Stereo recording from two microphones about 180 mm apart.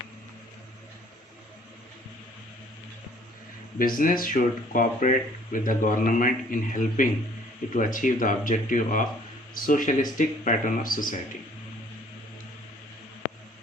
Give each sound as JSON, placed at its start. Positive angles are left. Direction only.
{"t": 3.8, "sound": "speech", "side_deg": 50}